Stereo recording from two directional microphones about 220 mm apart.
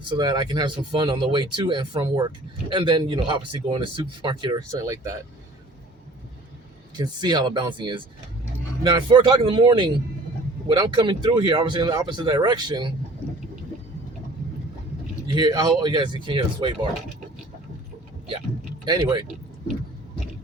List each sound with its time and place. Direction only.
0.1 s speech: 20° right (ahead or behind)
6.9 s speech: 20° right (ahead or behind)
15.3 s speech: 20° right (ahead or behind)
18.9 s speech: 20° right (ahead or behind)